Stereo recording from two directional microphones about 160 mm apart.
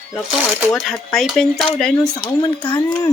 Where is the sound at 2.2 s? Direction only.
30° left (ahead or behind).